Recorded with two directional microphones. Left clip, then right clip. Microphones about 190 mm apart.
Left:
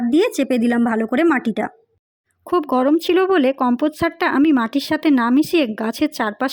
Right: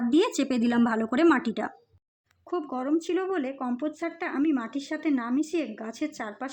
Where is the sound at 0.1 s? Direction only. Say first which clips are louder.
Left 8 dB; 20° left (ahead or behind).